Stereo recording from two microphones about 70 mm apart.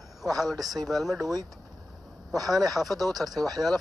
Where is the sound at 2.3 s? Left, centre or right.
Right.